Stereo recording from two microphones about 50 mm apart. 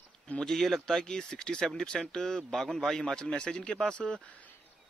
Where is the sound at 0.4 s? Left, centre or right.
Centre.